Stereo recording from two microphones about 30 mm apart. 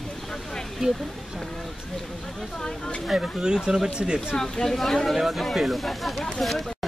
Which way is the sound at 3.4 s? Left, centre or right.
Right.